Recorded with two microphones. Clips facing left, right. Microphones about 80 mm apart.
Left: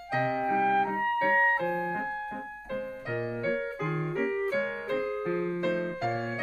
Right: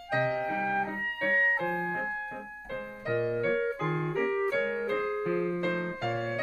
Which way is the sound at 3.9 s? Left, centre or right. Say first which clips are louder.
Right 1 dB; right.